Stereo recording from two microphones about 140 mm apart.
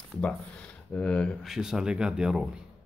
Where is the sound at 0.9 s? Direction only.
10° left (ahead or behind).